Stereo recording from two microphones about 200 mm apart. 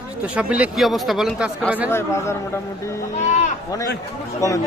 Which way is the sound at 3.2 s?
35° left (ahead or behind).